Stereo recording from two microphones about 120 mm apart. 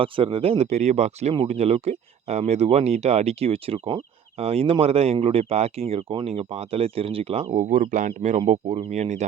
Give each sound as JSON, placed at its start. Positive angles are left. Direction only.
{"t": 0.0, "sound": "speech", "side_deg": -50}
{"t": 5.9, "sound": "speech", "side_deg": -50}